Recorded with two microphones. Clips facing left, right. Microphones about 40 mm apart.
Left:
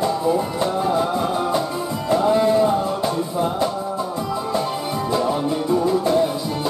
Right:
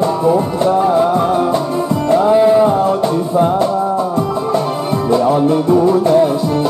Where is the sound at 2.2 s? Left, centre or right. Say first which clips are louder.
Right 6 dB; centre.